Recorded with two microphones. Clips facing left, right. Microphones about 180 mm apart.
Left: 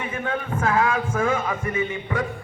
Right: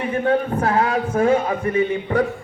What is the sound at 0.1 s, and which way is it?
Speech, 35° right (ahead or behind).